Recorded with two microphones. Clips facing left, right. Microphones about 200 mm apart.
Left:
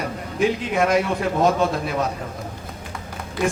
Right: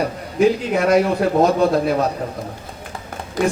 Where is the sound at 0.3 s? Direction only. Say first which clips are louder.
Right 4 dB; 35° right (ahead or behind).